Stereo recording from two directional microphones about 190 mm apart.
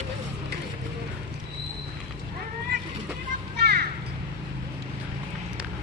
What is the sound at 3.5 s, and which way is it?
Children playing, 55° right (ahead or behind).